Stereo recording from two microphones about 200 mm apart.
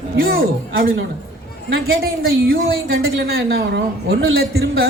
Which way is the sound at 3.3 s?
50° right (ahead or behind).